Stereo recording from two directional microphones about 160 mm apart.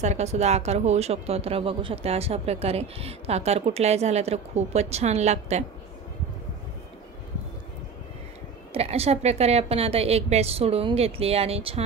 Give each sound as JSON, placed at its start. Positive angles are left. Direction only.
{"t": 0.0, "sound": "speech", "side_deg": -45}
{"t": 8.7, "sound": "speech", "side_deg": -40}